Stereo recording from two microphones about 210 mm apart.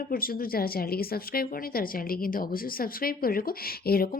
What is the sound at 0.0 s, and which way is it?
A woman's voice, 45° left (ahead or behind).